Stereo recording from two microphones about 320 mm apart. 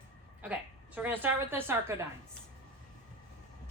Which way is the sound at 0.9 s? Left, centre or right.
Centre.